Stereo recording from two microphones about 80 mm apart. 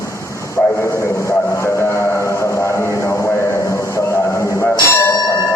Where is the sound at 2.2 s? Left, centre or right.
Left.